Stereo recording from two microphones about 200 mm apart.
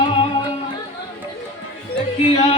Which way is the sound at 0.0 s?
25° left (ahead or behind).